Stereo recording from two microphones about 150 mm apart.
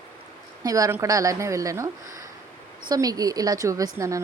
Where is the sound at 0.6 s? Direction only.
25° right (ahead or behind).